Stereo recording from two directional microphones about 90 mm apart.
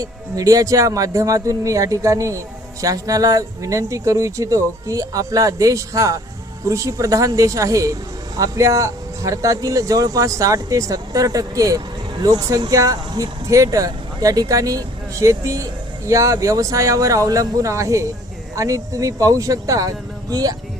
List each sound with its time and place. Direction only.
0.0 s speech: 40° right (ahead or behind)